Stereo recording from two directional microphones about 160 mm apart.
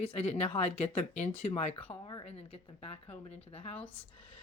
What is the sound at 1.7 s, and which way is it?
Speech, 10° left (ahead or behind).